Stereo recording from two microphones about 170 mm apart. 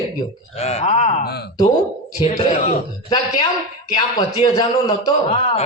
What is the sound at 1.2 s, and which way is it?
Speech, 70° left (ahead or behind).